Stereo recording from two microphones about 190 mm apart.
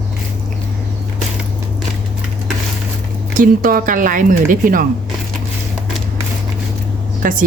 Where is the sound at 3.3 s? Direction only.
45° right (ahead or behind).